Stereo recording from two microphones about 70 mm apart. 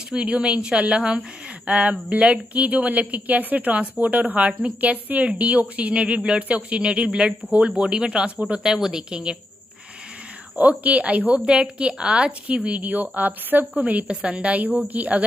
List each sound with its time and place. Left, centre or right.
0.1 s a woman's voice: centre
10.5 s a woman's voice: right